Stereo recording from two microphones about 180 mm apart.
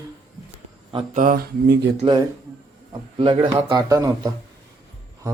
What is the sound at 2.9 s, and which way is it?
A man's voice, 30° right (ahead or behind).